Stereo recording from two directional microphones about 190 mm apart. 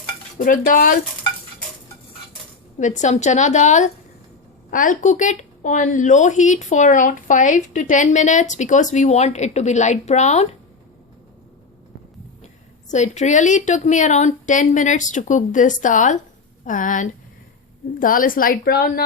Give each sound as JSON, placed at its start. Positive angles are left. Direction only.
{"t": 0.3, "sound": "a woman's voice", "side_deg": 45}
{"t": 2.7, "sound": "a woman's voice", "side_deg": 40}
{"t": 12.9, "sound": "a woman's voice", "side_deg": 40}